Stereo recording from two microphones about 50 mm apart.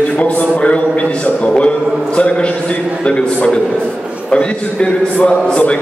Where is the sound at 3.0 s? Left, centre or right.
Left.